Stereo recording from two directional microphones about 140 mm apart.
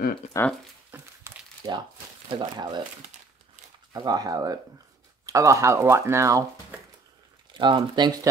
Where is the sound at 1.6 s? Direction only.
30° right (ahead or behind).